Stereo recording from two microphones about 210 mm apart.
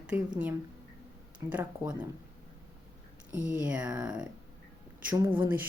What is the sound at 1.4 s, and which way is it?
Speech, 15° right (ahead or behind).